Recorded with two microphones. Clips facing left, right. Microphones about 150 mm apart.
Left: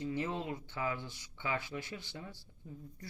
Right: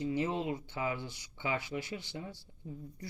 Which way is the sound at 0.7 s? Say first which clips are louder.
Right 2 dB; 20° right (ahead or behind).